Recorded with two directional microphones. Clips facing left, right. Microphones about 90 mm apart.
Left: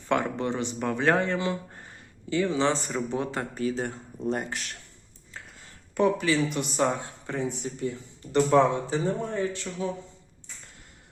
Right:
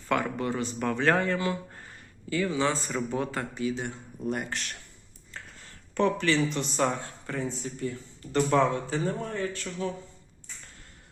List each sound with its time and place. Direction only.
0.1 s a man's voice: 25° left (ahead or behind)
3.5 s speech: 40° left (ahead or behind)
4.2 s speech: 30° left (ahead or behind)
5.9 s speech: 10° left (ahead or behind)